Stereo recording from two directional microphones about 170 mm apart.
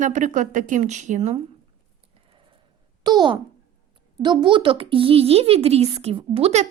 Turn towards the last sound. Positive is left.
turn(degrees=-40)  # may be behind; listen again after turning